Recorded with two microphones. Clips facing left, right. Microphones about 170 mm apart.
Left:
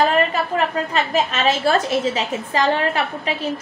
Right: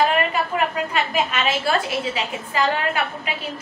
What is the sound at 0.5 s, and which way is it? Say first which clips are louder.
A woman's voice: left 3 dB; 35° left (ahead or behind).